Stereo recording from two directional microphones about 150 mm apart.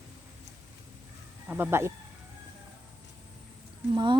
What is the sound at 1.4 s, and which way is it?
Speech, 15° right (ahead or behind).